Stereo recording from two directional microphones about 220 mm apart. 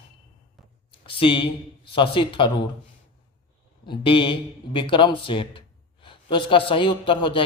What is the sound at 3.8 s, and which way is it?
A man's voice, 25° left (ahead or behind).